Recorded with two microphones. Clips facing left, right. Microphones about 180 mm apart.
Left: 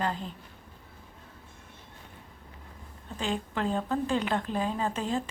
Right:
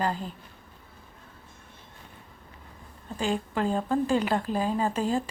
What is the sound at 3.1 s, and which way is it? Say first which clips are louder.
A woman's voice: right 3 dB; 5° right (ahead or behind).